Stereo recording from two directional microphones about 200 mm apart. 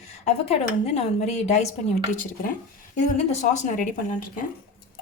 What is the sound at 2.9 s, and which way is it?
Speech, 35° left (ahead or behind).